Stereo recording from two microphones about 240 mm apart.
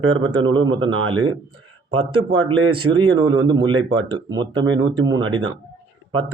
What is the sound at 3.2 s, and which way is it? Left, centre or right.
Speech, centre.